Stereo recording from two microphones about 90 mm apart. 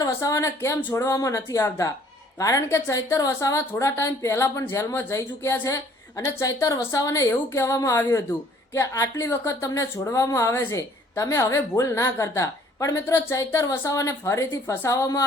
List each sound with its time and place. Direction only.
0.0 s a woman's voice: 35° left (ahead or behind)